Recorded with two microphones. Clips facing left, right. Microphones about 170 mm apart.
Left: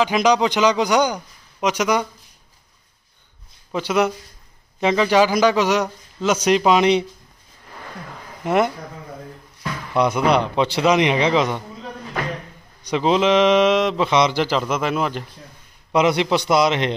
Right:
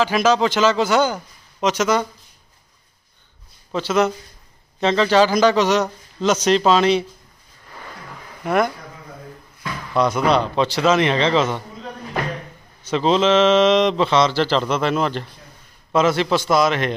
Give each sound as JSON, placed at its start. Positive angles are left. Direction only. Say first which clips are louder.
{"t": 0.0, "sound": "speech", "louder": "even", "side_deg": 15}
{"t": 3.7, "sound": "speech", "louder": "right 1 dB", "side_deg": 10}
{"t": 8.5, "sound": "a man's voice", "louder": "left 1 dB", "side_deg": 20}
{"t": 9.9, "sound": "speech", "louder": "even", "side_deg": 15}
{"t": 12.8, "sound": "a man's voice", "louder": "right 1 dB", "side_deg": 15}